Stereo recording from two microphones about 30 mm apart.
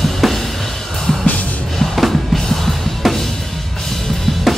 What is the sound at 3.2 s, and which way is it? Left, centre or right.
Drum, centre.